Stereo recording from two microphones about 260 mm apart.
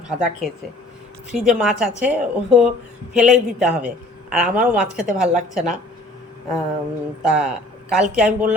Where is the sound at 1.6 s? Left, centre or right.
Centre.